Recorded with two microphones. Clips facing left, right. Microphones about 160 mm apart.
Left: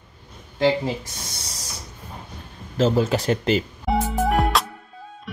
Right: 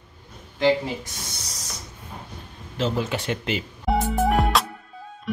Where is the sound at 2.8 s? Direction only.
40° left (ahead or behind).